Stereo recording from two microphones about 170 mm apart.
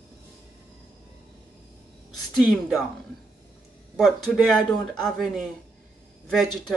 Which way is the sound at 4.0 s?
Centre (ahead or behind).